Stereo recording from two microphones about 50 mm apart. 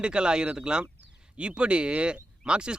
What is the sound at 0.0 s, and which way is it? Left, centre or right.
Speech, centre.